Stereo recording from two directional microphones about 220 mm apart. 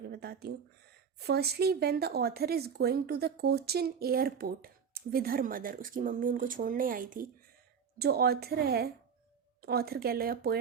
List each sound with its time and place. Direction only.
0.1 s speech: 45° right (ahead or behind)